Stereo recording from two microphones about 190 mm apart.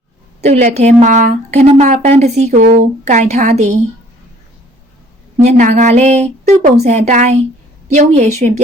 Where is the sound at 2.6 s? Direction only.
55° right (ahead or behind).